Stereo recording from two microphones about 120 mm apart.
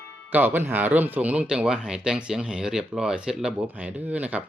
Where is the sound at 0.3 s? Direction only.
15° right (ahead or behind).